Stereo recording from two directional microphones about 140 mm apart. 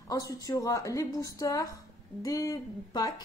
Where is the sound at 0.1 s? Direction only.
25° left (ahead or behind).